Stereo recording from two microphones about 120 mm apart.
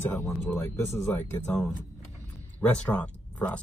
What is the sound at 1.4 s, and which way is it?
Speech, 5° left (ahead or behind).